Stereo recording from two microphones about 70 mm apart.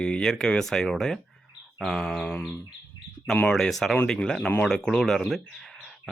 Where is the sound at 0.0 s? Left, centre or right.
Centre.